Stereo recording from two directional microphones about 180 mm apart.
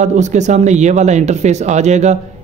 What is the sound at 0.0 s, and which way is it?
Speech, 40° right (ahead or behind).